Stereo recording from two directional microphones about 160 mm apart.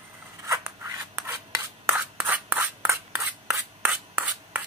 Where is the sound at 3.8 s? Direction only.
10° right (ahead or behind).